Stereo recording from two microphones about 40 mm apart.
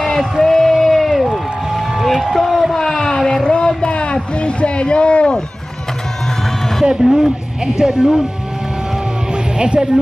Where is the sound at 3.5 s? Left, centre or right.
Left.